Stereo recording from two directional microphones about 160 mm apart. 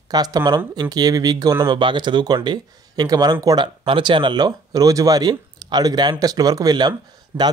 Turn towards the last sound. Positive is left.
turn(degrees=-25)  # may be behind; listen again after turning